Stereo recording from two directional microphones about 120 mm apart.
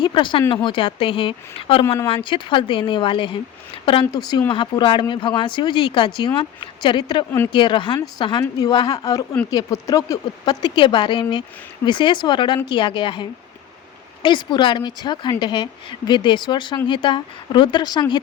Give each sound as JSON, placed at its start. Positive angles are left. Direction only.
{"t": 0.0, "sound": "a woman's voice", "side_deg": 45}